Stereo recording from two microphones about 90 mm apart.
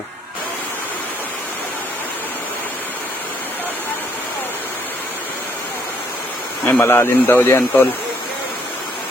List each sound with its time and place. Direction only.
6.7 s speech: 20° left (ahead or behind)